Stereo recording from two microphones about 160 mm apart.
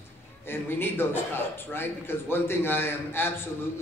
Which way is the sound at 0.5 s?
15° left (ahead or behind).